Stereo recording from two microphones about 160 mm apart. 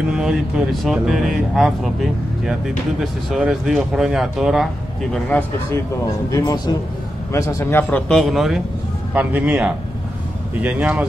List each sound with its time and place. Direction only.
0.1 s speech: 5° right (ahead or behind)
5.1 s speech: 10° left (ahead or behind)
6.3 s a man's voice: 25° left (ahead or behind)
8.1 s speech: centre (ahead or behind)